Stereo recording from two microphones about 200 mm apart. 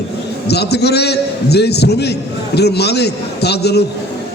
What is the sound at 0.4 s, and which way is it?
A man's voice, 55° left (ahead or behind).